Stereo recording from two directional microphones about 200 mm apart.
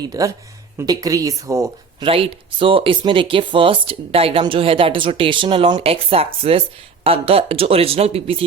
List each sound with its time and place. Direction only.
0.1 s speech: 15° right (ahead or behind)
2.0 s speech: 25° right (ahead or behind)